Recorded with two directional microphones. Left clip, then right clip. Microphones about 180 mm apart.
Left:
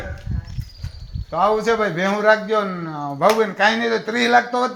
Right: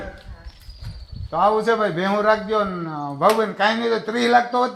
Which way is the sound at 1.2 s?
50° left (ahead or behind).